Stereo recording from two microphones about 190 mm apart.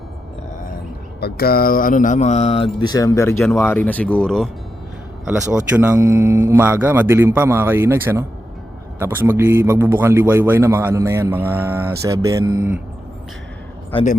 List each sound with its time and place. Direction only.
1.2 s mantra: 55° left (ahead or behind); by 3.3 s 15° left (ahead or behind)
3.4 s speech: 10° left (ahead or behind)
5.5 s a man's voice: 5° right (ahead or behind)
13.9 s mantra: 40° left (ahead or behind)